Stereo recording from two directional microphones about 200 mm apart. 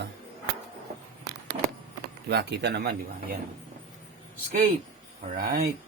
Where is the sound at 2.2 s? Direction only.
55° right (ahead or behind).